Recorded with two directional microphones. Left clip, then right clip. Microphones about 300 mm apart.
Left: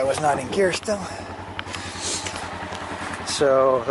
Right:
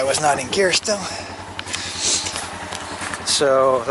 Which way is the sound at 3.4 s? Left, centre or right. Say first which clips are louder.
Right 1 dB; centre.